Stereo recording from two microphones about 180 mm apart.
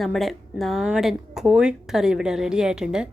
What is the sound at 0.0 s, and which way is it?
Speech, centre (ahead or behind).